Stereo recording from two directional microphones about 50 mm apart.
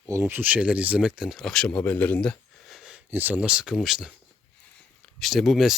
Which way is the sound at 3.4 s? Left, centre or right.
Centre.